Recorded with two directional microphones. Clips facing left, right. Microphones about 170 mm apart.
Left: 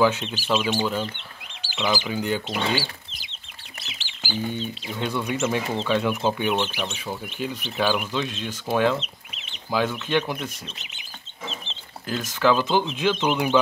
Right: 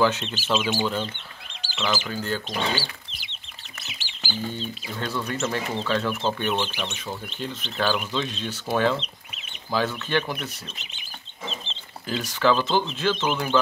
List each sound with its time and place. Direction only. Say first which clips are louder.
0.0 s speech: left 2 dB; 10° left (ahead or behind)
1.7 s speech: left 2 dB; 15° left (ahead or behind)
4.2 s chicken: left 3 dB; 15° left (ahead or behind)
5.0 s speech: left 3 dB; 10° left (ahead or behind)
12.1 s speech: left 1 dB; 5° left (ahead or behind)